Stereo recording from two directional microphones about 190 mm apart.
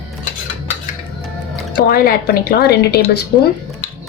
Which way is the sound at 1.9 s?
50° left (ahead or behind).